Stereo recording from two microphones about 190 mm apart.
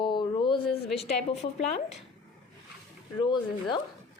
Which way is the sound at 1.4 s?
35° left (ahead or behind).